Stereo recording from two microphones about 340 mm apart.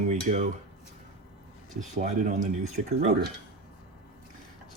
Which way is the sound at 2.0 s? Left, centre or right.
Right.